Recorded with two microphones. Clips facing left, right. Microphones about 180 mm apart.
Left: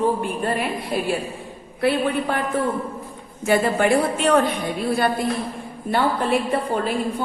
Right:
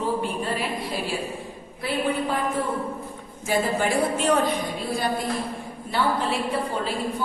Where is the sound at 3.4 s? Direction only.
65° left (ahead or behind).